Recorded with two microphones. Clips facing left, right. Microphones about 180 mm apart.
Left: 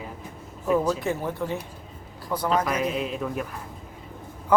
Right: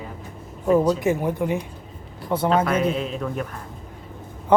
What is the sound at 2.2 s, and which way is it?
Speech, 25° right (ahead or behind).